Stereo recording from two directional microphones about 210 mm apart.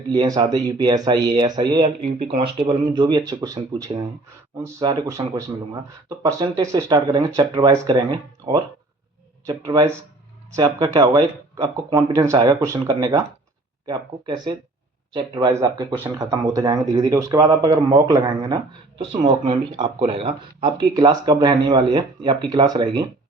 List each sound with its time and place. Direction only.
0.1 s speech: 20° right (ahead or behind)
9.5 s speech: 15° right (ahead or behind)